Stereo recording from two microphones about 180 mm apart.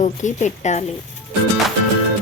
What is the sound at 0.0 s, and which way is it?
Speech, 45° left (ahead or behind).